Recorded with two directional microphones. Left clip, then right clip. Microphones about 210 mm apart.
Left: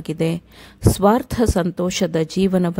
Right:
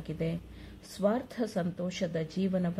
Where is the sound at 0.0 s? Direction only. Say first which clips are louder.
Left 13 dB; 45° left (ahead or behind).